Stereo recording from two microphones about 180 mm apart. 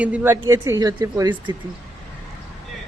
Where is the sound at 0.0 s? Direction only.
10° right (ahead or behind).